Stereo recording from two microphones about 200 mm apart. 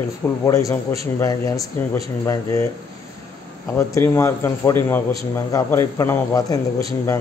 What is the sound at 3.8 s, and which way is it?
A man's voice, 10° left (ahead or behind).